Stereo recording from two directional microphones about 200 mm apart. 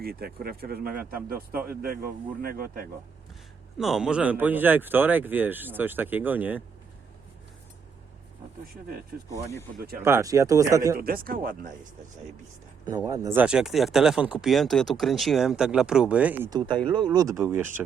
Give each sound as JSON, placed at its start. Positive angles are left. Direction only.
{"t": 0.0, "sound": "speech", "side_deg": -50}
{"t": 3.8, "sound": "speech", "side_deg": 0}
{"t": 10.0, "sound": "speech", "side_deg": -15}
{"t": 10.9, "sound": "speech", "side_deg": -50}
{"t": 13.1, "sound": "speech", "side_deg": -20}
{"t": 16.5, "sound": "speech", "side_deg": -20}